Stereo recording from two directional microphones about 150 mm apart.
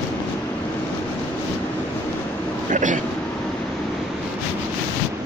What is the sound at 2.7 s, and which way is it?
Speech, 55° right (ahead or behind).